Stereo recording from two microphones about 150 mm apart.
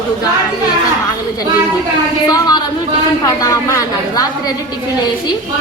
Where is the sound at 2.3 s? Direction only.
25° left (ahead or behind).